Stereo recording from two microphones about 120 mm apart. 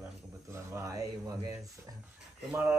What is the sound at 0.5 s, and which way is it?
Speech, 25° right (ahead or behind).